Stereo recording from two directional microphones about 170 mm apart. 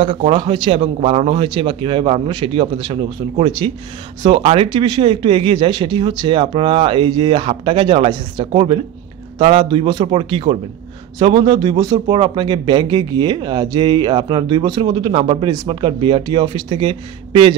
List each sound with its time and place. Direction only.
0.0 s speech: 30° right (ahead or behind)